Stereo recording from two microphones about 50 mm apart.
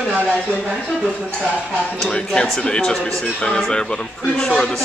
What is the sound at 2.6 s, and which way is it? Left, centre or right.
Speech, centre.